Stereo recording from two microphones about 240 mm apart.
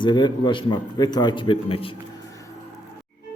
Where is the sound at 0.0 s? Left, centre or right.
Centre.